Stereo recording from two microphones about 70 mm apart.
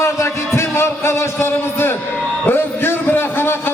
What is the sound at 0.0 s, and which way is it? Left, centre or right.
Music, left.